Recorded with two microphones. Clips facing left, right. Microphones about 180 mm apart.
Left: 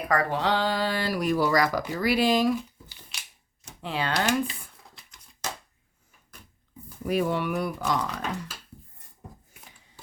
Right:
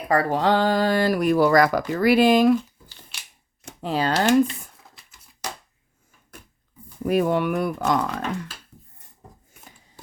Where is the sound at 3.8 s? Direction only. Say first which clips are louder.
Right 6 dB; 40° right (ahead or behind).